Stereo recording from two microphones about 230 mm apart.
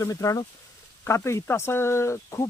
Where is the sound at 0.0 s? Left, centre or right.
Centre.